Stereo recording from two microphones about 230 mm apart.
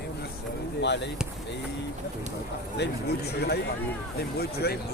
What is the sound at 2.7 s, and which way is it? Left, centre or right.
Speech, left.